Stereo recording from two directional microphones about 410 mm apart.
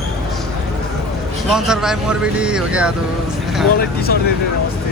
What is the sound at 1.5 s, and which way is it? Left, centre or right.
Speech, centre.